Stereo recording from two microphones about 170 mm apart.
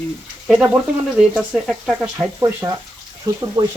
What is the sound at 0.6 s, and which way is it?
Speech, 10° right (ahead or behind).